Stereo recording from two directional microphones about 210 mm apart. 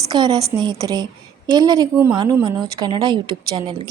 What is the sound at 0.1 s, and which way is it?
A woman's voice, 20° right (ahead or behind).